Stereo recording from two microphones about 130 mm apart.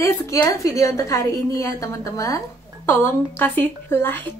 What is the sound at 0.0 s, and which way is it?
A woman's voice, 25° left (ahead or behind).